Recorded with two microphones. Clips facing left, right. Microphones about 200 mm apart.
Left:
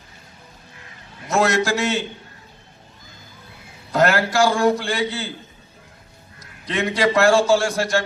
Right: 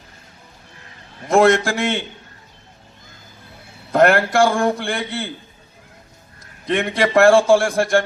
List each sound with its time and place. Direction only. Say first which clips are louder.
1.3 s a man's voice: right 5 dB; 55° right (ahead or behind)
3.9 s a man's voice: right 4 dB; 55° right (ahead or behind)
6.4 s a man's voice: right 3 dB; 55° right (ahead or behind)